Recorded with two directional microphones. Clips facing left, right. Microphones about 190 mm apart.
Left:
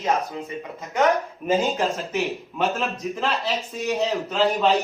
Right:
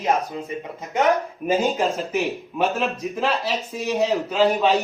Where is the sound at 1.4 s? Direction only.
5° right (ahead or behind).